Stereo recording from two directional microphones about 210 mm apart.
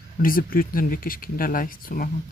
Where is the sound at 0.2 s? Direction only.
45° left (ahead or behind).